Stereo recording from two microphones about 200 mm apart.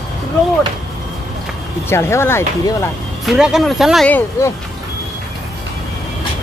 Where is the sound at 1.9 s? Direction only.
10° left (ahead or behind).